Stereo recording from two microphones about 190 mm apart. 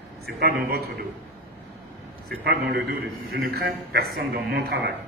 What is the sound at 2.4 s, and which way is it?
A man's voice, 60° right (ahead or behind).